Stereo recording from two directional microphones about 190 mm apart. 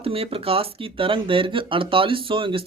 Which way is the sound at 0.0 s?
30° right (ahead or behind).